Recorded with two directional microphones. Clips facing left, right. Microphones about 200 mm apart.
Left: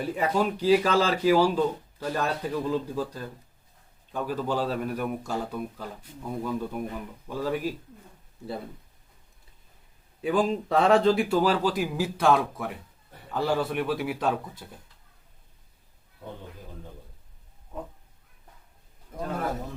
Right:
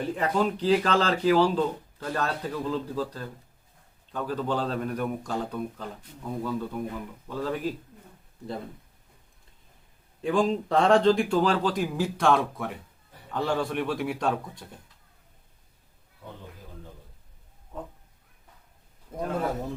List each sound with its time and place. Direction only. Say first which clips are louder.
0.0 s speech: even; 5° left (ahead or behind)
10.2 s speech: even; 5° left (ahead or behind)
19.1 s a sound: right 2 dB; 30° right (ahead or behind)